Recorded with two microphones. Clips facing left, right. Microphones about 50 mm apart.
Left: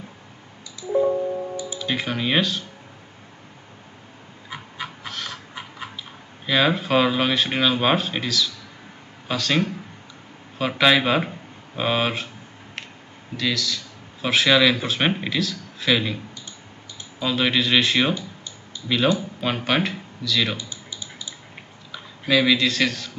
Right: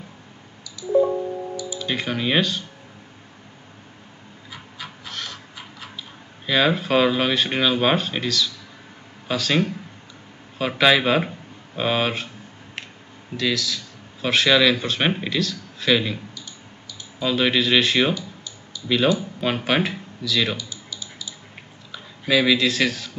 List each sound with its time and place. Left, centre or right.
1.8 s speech: centre
5.0 s a sound: centre
6.4 s speech: centre
13.4 s speech: centre
17.2 s speech: centre
19.1 s speech: centre
20.5 s typing: left
21.9 s speech: centre